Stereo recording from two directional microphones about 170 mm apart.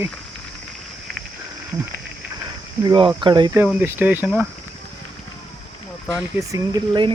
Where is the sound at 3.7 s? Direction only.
10° right (ahead or behind).